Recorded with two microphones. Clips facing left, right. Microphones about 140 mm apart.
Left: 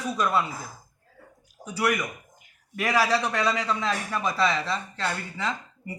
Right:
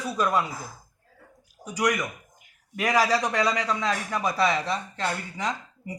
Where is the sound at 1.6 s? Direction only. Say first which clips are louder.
Even; 15° right (ahead or behind).